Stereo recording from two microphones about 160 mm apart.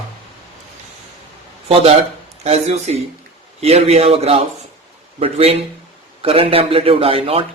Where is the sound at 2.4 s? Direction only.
40° right (ahead or behind).